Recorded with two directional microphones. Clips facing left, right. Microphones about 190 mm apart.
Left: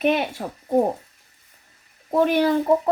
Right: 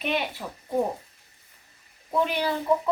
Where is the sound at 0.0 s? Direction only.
50° left (ahead or behind).